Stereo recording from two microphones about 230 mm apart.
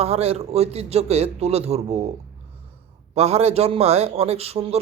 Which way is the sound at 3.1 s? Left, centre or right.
Right.